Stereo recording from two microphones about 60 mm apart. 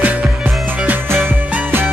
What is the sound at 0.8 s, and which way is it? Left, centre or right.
Music, right.